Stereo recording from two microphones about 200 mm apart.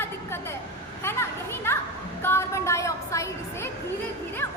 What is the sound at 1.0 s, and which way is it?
Children playing, 10° left (ahead or behind).